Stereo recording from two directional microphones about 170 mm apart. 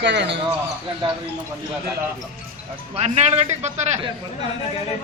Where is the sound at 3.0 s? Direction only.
40° right (ahead or behind).